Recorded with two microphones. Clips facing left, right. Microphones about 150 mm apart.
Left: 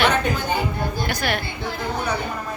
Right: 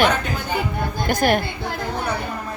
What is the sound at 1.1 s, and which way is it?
Speech, 45° right (ahead or behind).